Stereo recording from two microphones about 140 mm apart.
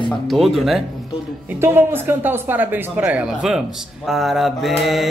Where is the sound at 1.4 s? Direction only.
15° right (ahead or behind).